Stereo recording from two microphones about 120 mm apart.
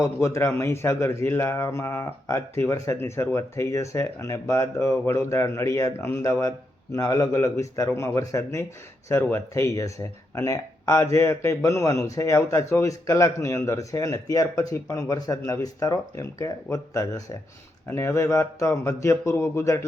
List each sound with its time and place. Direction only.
0.0 s speech: 25° left (ahead or behind)